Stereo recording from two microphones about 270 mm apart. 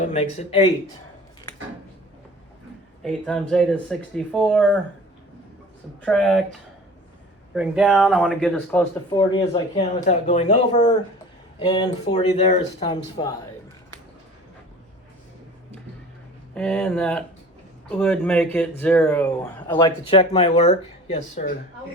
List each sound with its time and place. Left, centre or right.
0.0 s speech: left
3.0 s speech: centre
6.0 s speech: centre
9.0 s speech: centre
16.6 s speech: centre; by 21.4 s left